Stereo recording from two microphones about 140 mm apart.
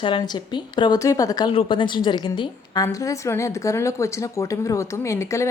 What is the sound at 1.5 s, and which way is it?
A woman's voice, 35° left (ahead or behind).